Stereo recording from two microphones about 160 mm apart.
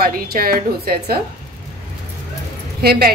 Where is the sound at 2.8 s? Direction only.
75° right (ahead or behind).